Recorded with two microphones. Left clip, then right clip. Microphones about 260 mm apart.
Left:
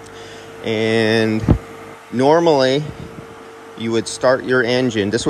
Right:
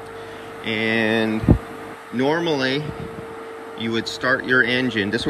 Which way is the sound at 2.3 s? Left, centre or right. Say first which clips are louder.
Left 8 dB; left.